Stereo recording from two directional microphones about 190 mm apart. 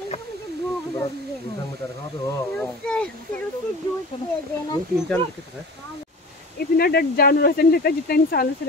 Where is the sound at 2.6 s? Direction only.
5° left (ahead or behind).